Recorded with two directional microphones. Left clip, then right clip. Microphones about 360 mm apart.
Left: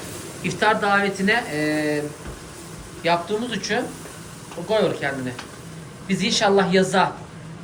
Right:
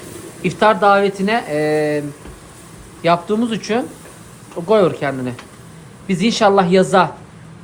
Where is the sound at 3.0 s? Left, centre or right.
Centre.